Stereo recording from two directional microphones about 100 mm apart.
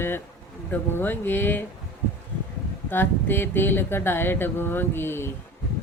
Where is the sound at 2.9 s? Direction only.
20° left (ahead or behind).